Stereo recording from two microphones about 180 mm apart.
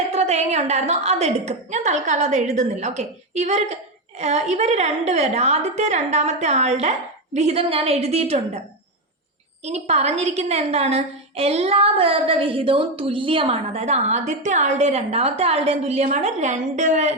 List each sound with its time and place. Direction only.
0.1 s a woman's voice: 35° right (ahead or behind)
9.6 s a woman's voice: 35° right (ahead or behind)